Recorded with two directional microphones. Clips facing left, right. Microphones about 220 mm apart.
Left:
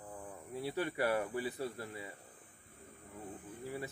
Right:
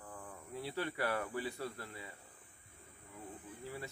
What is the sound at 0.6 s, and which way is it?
Speech, 20° left (ahead or behind).